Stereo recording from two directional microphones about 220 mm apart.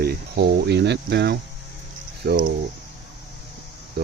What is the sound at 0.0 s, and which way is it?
Speech, 45° right (ahead or behind).